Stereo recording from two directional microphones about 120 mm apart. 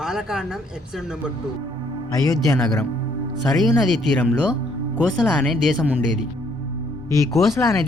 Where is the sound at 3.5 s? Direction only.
Centre (ahead or behind).